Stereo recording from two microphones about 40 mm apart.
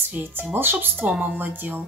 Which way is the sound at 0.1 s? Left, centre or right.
Right.